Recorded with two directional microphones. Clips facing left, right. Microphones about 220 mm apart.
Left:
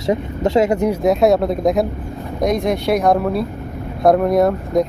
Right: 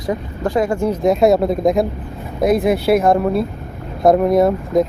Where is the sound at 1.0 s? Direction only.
Centre (ahead or behind).